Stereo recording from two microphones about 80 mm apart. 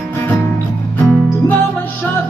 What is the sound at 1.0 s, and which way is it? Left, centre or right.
Music, left.